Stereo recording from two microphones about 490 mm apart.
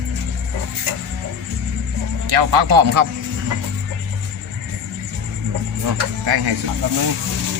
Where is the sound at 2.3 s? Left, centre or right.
Right.